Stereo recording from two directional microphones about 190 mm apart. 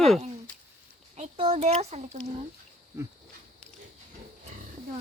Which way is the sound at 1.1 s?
35° right (ahead or behind).